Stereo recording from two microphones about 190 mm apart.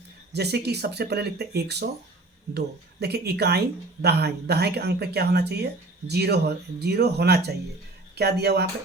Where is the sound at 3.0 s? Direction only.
60° right (ahead or behind).